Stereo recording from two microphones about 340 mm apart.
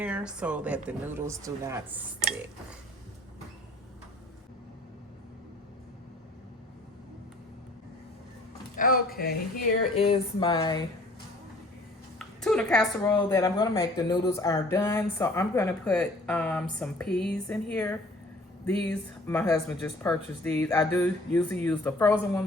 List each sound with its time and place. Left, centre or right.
0.0 s a woman's voice: centre
8.7 s speech: left
12.2 s a woman's voice: centre